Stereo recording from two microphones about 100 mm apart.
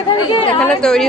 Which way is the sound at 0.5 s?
10° left (ahead or behind).